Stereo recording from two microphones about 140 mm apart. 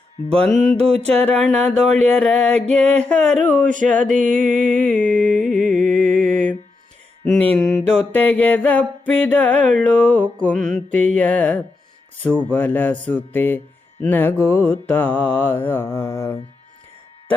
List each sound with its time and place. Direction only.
0.3 s music: 5° left (ahead or behind)
0.8 s mantra: 50° right (ahead or behind)
1.0 s mantra: 5° left (ahead or behind)
4.0 s music: 65° right (ahead or behind)
7.3 s mantra: 5° left (ahead or behind)